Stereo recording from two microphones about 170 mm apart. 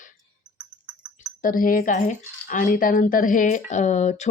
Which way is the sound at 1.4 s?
55° left (ahead or behind).